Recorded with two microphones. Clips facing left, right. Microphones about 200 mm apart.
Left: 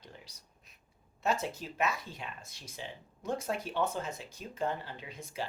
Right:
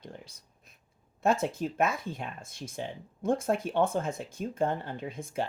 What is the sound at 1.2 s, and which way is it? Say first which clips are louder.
Speech: right 6 dB; 50° right (ahead or behind).